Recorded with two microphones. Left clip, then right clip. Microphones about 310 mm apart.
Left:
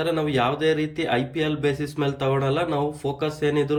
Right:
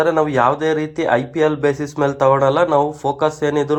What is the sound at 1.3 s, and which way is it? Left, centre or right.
Speech, centre.